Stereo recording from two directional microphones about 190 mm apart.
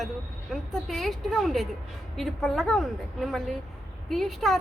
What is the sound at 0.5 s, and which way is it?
A woman's voice, centre (ahead or behind).